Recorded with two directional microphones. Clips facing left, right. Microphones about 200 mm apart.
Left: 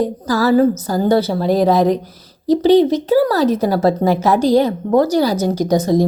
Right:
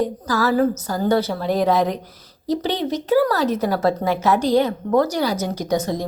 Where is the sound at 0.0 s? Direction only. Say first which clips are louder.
Left 4 dB; 35° left (ahead or behind).